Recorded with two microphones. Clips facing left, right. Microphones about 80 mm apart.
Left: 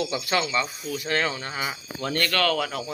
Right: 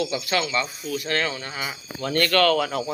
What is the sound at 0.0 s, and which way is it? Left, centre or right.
Speech, left.